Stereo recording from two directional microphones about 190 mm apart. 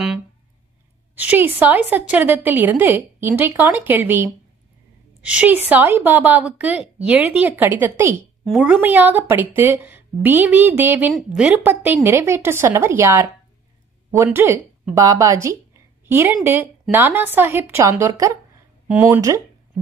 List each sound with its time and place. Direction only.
1.1 s a woman's voice: 10° right (ahead or behind)
19.1 s a woman's voice: 15° right (ahead or behind)